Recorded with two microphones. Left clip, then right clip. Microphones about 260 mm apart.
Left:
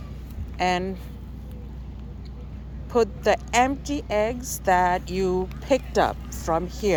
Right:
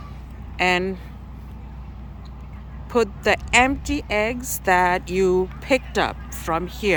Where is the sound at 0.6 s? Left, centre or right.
Centre.